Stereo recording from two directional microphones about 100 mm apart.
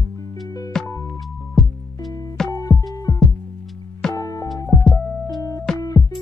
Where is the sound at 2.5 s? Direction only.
30° left (ahead or behind).